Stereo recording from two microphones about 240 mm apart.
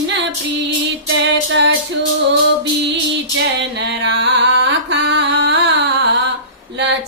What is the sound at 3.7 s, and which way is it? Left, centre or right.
Carnatic music, right.